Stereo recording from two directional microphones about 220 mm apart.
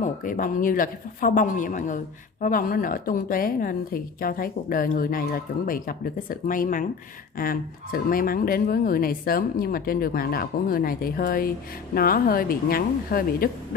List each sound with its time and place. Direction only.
0.0 s speech: 40° left (ahead or behind)